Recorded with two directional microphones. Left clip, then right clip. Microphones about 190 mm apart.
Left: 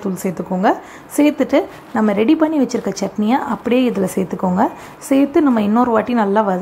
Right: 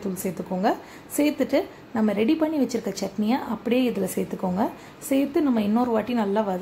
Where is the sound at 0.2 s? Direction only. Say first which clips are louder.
Left 8 dB; 20° left (ahead or behind).